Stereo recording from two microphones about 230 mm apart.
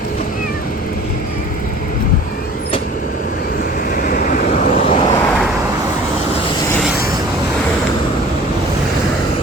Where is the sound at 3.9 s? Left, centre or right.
Left.